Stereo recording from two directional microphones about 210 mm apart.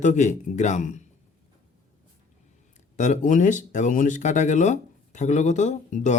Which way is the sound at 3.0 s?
35° left (ahead or behind).